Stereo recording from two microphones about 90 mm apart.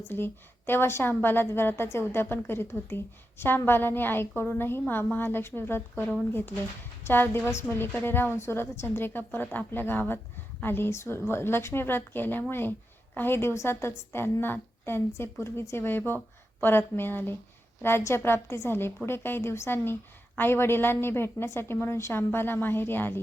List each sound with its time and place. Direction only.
0.1 s a woman's voice: 25° left (ahead or behind)